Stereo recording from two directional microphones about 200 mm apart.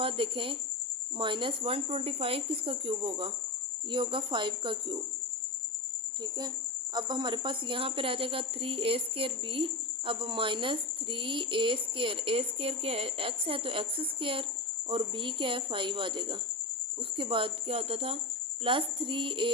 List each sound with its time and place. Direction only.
0.0 s speech: 25° right (ahead or behind)
6.9 s speech: 20° right (ahead or behind)